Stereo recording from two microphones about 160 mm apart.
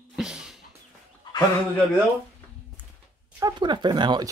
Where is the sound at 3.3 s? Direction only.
25° right (ahead or behind).